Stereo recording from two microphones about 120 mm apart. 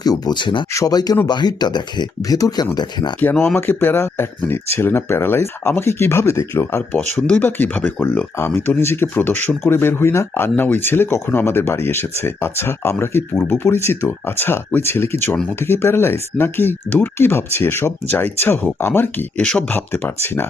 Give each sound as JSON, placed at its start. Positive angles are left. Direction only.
{"t": 0.0, "sound": "speech", "side_deg": 35}
{"t": 0.7, "sound": "speech", "side_deg": 30}
{"t": 3.5, "sound": "speech", "side_deg": 15}